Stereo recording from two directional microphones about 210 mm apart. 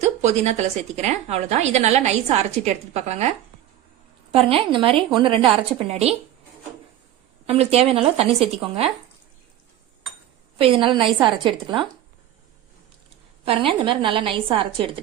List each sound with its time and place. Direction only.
0.0 s a woman's voice: 35° right (ahead or behind)
7.4 s a woman's voice: 30° right (ahead or behind)
10.6 s a woman's voice: 25° right (ahead or behind)
13.4 s a woman's voice: 25° right (ahead or behind)